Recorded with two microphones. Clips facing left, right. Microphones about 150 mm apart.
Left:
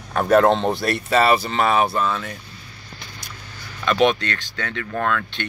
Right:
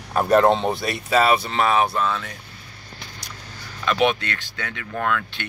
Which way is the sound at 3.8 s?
5° right (ahead or behind).